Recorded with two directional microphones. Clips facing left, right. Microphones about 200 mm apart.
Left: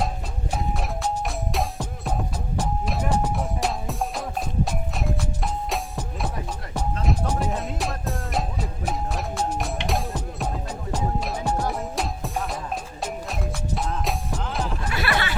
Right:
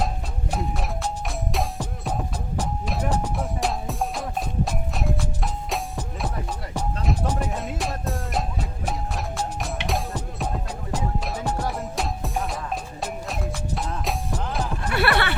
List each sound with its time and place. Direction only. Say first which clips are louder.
0.5 s music: even; centre (ahead or behind)
14.8 s music: right 6 dB; 60° right (ahead or behind)